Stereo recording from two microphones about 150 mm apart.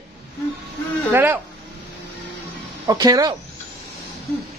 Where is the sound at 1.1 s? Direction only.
10° right (ahead or behind).